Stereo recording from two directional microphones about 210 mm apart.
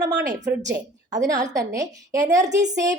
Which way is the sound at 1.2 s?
15° right (ahead or behind).